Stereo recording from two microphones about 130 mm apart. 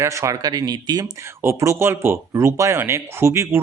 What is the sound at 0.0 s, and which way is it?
Speech, 20° right (ahead or behind).